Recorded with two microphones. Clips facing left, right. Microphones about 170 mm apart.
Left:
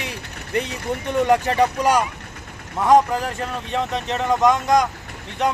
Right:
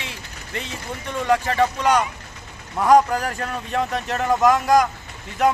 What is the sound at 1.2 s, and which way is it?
Speech, 20° left (ahead or behind).